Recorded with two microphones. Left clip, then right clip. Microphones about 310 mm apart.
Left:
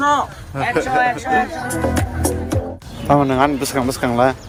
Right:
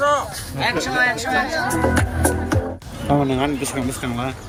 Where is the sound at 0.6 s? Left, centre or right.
Centre.